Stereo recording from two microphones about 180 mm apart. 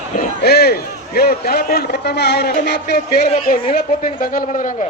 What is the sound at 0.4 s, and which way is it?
A man's voice, 60° left (ahead or behind).